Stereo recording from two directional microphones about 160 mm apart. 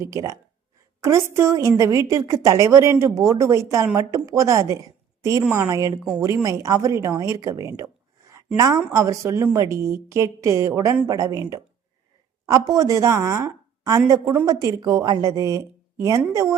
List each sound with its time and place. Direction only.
0.0 s a woman's voice: 20° right (ahead or behind)
7.8 s writing: 20° right (ahead or behind)
8.5 s a woman's voice: 20° right (ahead or behind)